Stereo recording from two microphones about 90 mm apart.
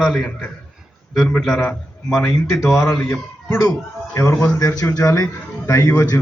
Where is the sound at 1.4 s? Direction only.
5° left (ahead or behind).